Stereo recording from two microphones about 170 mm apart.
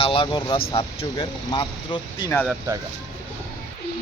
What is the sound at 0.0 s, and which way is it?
Speech, 30° left (ahead or behind).